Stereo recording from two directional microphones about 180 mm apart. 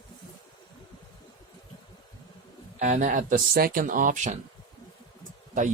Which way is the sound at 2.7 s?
40° right (ahead or behind).